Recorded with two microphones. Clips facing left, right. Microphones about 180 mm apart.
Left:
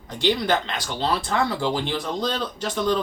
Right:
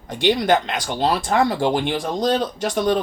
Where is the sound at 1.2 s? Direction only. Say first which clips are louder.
Right 5 dB; 50° right (ahead or behind).